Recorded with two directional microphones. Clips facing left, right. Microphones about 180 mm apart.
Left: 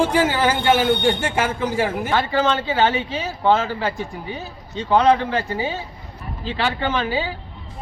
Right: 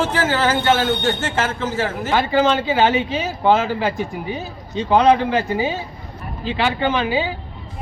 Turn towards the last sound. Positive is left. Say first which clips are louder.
# right 3 dB
turn(degrees=-15)  # may be behind; listen again after turning